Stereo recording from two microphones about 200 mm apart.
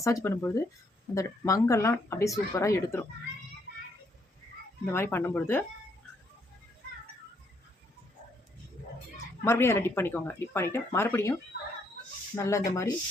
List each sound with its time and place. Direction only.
0.0 s speech: 15° left (ahead or behind)
4.9 s speech: 10° left (ahead or behind)
9.4 s speech: 15° left (ahead or behind)